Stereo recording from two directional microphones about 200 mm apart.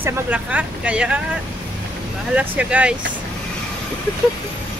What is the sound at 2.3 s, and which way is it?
Speech, 5° right (ahead or behind).